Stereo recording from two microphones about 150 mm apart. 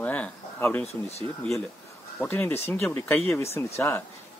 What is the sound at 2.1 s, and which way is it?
Speech, 15° left (ahead or behind).